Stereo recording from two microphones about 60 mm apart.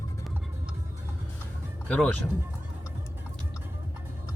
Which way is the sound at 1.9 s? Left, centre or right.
Left.